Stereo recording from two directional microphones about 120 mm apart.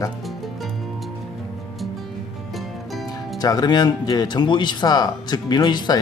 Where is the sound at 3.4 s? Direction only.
35° left (ahead or behind).